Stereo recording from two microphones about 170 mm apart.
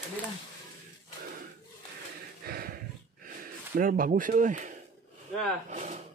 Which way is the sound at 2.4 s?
60° right (ahead or behind).